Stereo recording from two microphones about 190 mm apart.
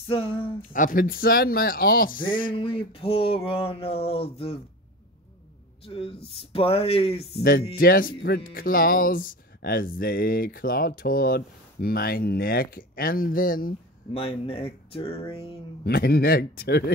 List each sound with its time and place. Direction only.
0.0 s speech: 30° left (ahead or behind)
0.7 s speech: 45° left (ahead or behind)
2.2 s a sound: 25° left (ahead or behind)
5.9 s speech: 30° left (ahead or behind)
7.7 s speech: 50° left (ahead or behind)
14.1 s a sound: 30° left (ahead or behind)
15.8 s a man's voice: 55° left (ahead or behind)